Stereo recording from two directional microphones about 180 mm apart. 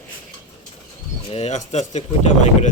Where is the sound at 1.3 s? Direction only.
35° left (ahead or behind).